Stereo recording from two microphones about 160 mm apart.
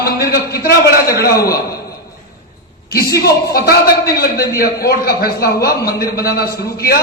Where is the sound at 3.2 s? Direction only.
75° left (ahead or behind).